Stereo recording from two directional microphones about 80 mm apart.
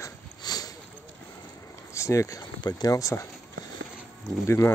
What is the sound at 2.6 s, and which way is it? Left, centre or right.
Speech, left.